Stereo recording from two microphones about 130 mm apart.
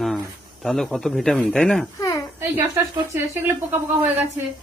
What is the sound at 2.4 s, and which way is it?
Speech, 20° right (ahead or behind).